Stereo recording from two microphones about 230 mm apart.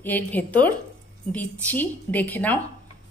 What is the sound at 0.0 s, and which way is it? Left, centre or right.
Speech, centre.